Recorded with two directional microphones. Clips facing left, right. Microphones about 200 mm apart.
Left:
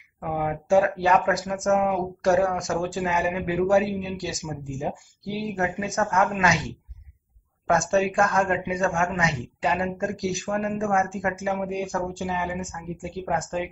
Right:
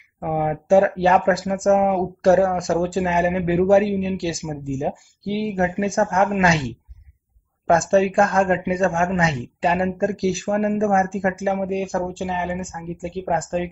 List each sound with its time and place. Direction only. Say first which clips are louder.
0.2 s speech: right 5 dB; 30° right (ahead or behind)
7.6 s speech: right 5 dB; 30° right (ahead or behind)